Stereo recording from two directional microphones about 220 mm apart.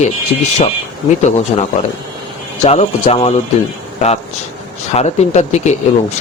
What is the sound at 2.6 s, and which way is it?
Speech, 30° left (ahead or behind).